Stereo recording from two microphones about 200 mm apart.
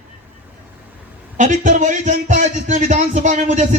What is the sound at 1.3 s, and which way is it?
A man's voice, 40° right (ahead or behind).